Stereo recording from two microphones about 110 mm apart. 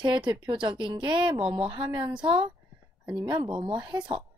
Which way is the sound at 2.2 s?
55° right (ahead or behind).